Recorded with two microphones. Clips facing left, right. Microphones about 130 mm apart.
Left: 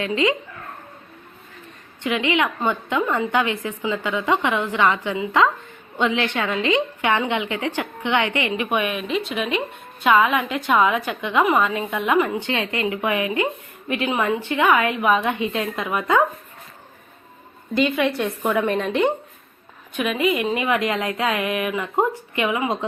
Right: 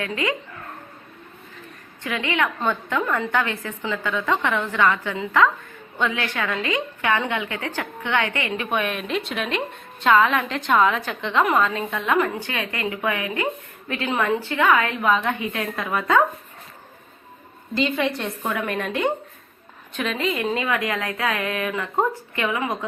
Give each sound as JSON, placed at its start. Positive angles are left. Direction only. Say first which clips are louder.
{"t": 0.0, "sound": "speech", "louder": "left 5 dB", "side_deg": 20}
{"t": 2.0, "sound": "a woman's voice", "louder": "left 3 dB", "side_deg": 15}
{"t": 12.4, "sound": "a woman's voice", "louder": "left 4 dB", "side_deg": 25}
{"t": 17.7, "sound": "a woman's voice", "louder": "left 3 dB", "side_deg": 15}